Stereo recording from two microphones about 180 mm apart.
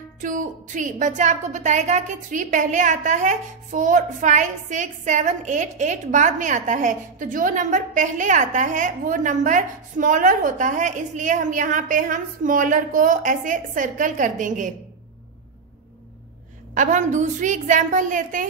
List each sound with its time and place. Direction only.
0.2 s a woman's voice: 45° right (ahead or behind)
16.7 s a woman's voice: 45° right (ahead or behind)